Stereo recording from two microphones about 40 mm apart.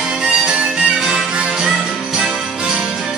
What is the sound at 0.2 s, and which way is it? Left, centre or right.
Music, right.